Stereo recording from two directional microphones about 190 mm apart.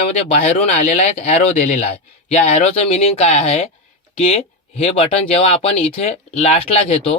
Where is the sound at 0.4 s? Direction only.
35° left (ahead or behind).